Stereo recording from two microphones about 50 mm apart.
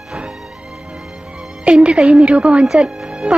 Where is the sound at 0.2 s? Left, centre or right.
Centre.